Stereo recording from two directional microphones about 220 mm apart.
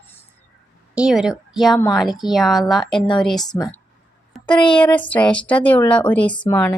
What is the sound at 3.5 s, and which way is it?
Speech, 15° left (ahead or behind).